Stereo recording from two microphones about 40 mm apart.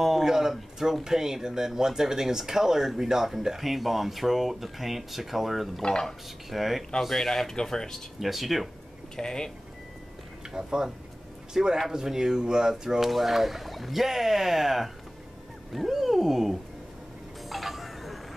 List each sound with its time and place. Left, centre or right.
0.0 s speech: centre
5.8 s speech: left
6.0 s speech: centre
8.2 s speech: centre
9.1 s speech: centre
10.5 s speech: centre
15.7 s wild animals: centre
17.5 s tick-tock: centre